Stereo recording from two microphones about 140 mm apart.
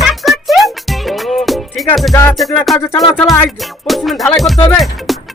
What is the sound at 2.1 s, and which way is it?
Music, 20° left (ahead or behind).